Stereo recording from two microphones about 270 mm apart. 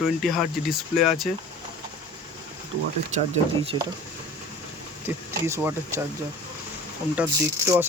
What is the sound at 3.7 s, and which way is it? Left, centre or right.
Speech, centre.